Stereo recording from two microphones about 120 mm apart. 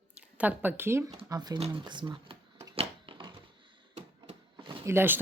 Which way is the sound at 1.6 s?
45° right (ahead or behind).